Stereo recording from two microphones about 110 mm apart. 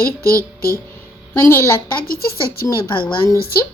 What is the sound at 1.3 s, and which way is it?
Speech, 25° left (ahead or behind).